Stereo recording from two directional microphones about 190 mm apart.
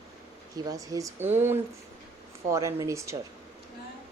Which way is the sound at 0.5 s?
20° right (ahead or behind).